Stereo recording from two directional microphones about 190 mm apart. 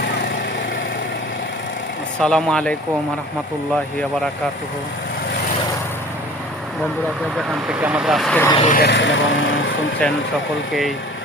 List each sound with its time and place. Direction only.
2.1 s speech: 5° left (ahead or behind)
7.3 s speech: 5° right (ahead or behind)
8.6 s speech: 45° left (ahead or behind)
8.9 s speech: 70° left (ahead or behind)
10.0 s speech: 5° left (ahead or behind)